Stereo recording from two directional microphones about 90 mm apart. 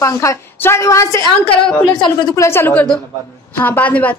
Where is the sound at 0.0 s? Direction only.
35° left (ahead or behind).